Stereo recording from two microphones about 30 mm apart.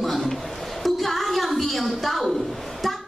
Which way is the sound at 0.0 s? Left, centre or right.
Centre.